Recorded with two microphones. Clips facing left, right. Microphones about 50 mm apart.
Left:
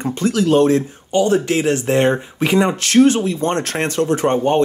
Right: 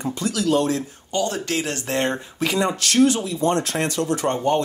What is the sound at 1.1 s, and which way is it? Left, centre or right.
Speech, left.